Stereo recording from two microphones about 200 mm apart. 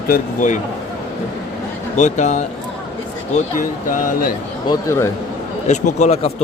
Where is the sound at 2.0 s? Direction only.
35° left (ahead or behind).